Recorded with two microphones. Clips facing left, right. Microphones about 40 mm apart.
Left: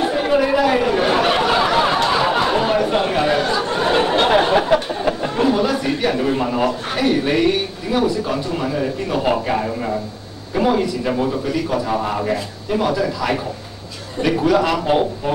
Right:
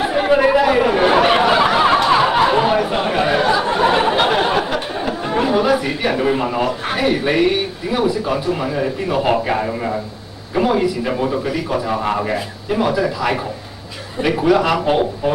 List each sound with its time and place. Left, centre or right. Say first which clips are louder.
0.0 s a sound: right 2 dB; centre
5.4 s a man's voice: right 2 dB; centre
12.0 s a man's voice: right 1 dB; centre